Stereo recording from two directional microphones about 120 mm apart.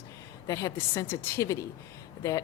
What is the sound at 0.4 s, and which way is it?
Speech, 30° left (ahead or behind).